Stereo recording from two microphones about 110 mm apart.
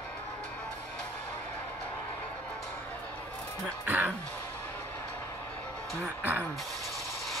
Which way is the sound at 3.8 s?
15° right (ahead or behind).